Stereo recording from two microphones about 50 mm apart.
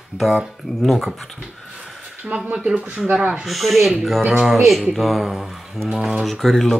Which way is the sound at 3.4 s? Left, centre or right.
Centre.